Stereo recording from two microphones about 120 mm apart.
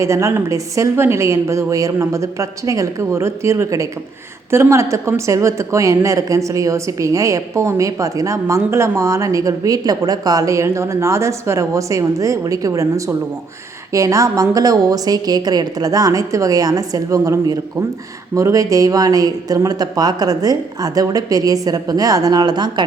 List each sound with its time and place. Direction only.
0.0 s a woman's voice: 25° right (ahead or behind)